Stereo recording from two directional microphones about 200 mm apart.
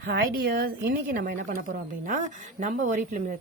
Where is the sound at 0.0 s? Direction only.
55° right (ahead or behind).